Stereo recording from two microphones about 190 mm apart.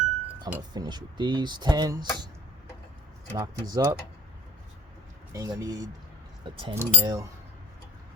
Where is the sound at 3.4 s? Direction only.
20° right (ahead or behind).